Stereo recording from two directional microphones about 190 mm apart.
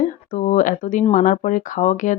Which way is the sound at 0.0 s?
45° left (ahead or behind).